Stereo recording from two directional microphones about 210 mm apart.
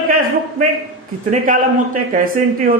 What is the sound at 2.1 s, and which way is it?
Speech, 45° right (ahead or behind).